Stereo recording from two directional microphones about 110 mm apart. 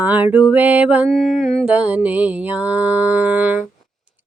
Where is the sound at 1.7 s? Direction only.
10° right (ahead or behind).